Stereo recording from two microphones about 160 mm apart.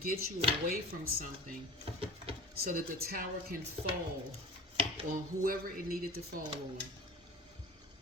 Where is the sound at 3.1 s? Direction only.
60° right (ahead or behind).